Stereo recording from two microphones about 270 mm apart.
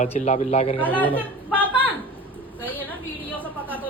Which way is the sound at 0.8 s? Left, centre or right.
Centre.